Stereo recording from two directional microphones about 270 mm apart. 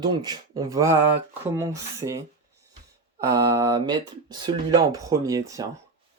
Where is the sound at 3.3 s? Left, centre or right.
Centre.